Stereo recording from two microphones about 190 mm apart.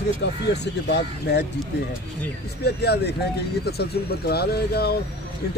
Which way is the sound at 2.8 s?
60° left (ahead or behind).